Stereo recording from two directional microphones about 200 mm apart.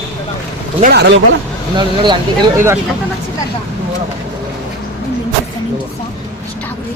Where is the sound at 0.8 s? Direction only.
50° right (ahead or behind).